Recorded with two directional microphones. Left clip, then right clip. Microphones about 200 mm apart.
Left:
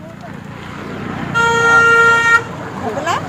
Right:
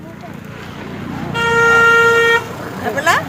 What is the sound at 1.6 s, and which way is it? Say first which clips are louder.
Vehicle: even; 65° left (ahead or behind).